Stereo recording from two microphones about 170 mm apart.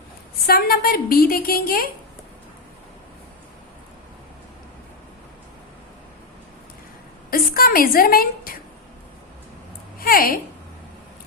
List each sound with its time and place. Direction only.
0.4 s a woman's voice: 60° left (ahead or behind)
7.3 s a woman's voice: 60° left (ahead or behind)
10.0 s a woman's voice: 60° left (ahead or behind)